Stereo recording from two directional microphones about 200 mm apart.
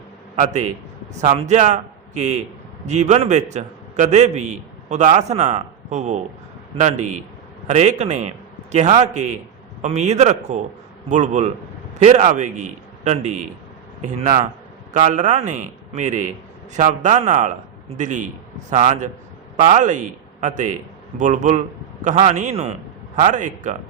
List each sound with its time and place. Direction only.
0.3 s a man's voice: 35° right (ahead or behind)
7.7 s a man's voice: 35° right (ahead or behind)
14.9 s a man's voice: 35° right (ahead or behind)